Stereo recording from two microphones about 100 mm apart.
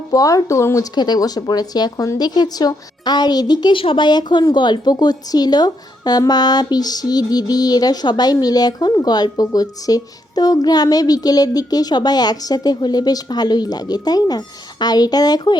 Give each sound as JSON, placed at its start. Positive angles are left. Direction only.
{"t": 0.1, "sound": "speech", "side_deg": 35}
{"t": 0.9, "sound": "speech", "side_deg": 45}